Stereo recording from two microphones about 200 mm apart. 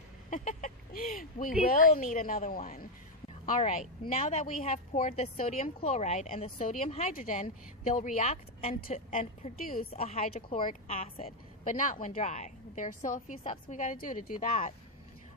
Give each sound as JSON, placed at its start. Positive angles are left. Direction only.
{"t": 0.3, "sound": "a sound", "side_deg": 40}
{"t": 1.6, "sound": "a woman's voice", "side_deg": 45}
{"t": 9.9, "sound": "a woman's voice", "side_deg": 35}